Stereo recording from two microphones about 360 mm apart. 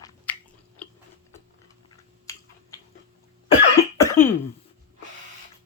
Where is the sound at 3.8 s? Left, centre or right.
Centre.